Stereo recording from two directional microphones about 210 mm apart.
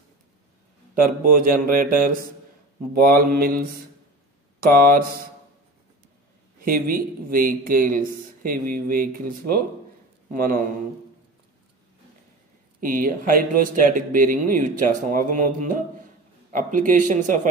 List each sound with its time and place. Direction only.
0.9 s speech: 45° right (ahead or behind)
6.6 s speech: 45° right (ahead or behind)
12.8 s speech: 40° right (ahead or behind)